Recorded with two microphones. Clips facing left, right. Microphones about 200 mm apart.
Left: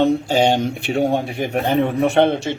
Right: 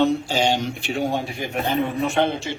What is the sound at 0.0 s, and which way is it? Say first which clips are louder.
Speech: left 4 dB; 55° left (ahead or behind).